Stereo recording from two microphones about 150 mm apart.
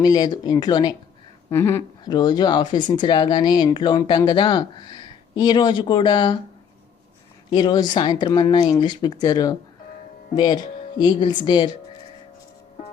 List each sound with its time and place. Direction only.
0.0 s speech: 25° left (ahead or behind)
1.5 s speech: 15° left (ahead or behind)
2.0 s speech: 30° left (ahead or behind)
7.5 s speech: 30° left (ahead or behind)